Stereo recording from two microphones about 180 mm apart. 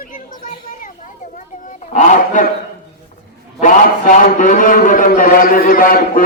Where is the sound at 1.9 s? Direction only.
45° left (ahead or behind).